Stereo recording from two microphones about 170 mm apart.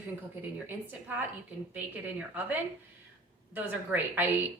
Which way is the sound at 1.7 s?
10° right (ahead or behind).